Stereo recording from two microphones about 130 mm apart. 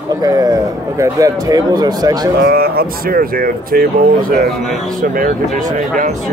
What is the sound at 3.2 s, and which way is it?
Speech, 90° right.